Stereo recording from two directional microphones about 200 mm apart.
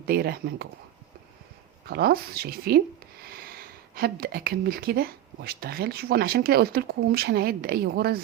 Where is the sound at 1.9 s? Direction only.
50° right (ahead or behind).